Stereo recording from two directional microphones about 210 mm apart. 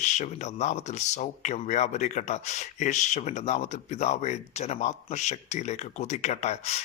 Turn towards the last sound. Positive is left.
turn(degrees=30)  # may be behind; listen again after turning